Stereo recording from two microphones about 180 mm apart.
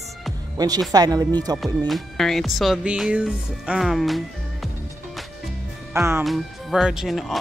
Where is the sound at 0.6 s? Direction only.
20° right (ahead or behind).